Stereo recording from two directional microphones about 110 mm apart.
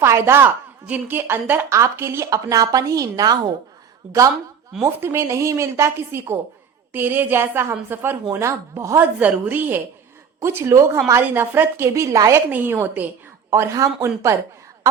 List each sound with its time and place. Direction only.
0.0 s a woman's voice: 25° right (ahead or behind)
4.0 s a woman's voice: 10° right (ahead or behind)
4.9 s a woman's voice: 20° right (ahead or behind)
12.5 s a woman's voice: 15° right (ahead or behind)
13.5 s a woman's voice: 30° right (ahead or behind)